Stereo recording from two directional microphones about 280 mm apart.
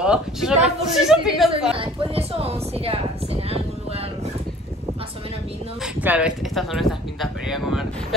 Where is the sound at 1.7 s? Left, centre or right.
Centre.